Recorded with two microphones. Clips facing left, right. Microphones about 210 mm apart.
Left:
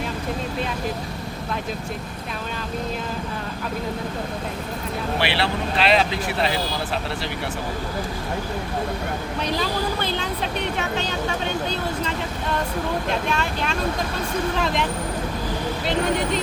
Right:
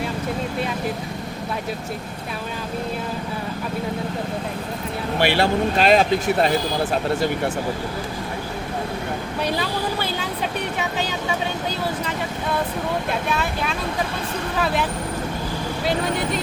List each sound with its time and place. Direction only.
5.2 s speech: 45° right (ahead or behind)
9.6 s vehicle: 5° right (ahead or behind)
13.3 s speech: 5° right (ahead or behind)